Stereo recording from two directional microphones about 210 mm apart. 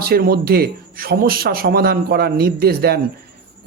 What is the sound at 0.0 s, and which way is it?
Speech, 45° right (ahead or behind).